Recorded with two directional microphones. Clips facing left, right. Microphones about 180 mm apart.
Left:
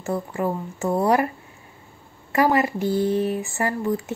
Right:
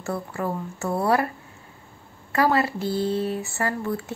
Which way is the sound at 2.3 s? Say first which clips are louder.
Left 2 dB; 15° left (ahead or behind).